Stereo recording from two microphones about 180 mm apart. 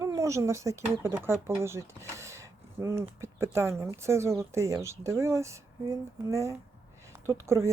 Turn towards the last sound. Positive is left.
turn(degrees=-15)  # may be behind; listen again after turning